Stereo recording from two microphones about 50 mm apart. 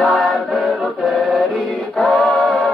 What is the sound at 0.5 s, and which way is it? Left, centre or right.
Choir, centre.